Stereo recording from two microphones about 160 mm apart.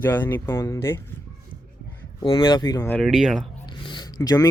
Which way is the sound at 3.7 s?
30° left (ahead or behind).